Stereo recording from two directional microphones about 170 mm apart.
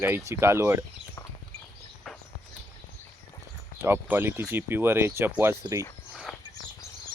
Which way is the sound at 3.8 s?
10° right (ahead or behind).